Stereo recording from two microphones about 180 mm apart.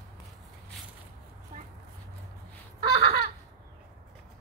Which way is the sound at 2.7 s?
60° right (ahead or behind).